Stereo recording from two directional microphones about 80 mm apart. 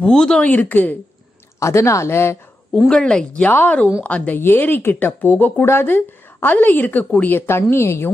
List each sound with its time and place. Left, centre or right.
0.0 s speech: centre
1.6 s speech: left
2.9 s speech: centre
3.4 s speech: left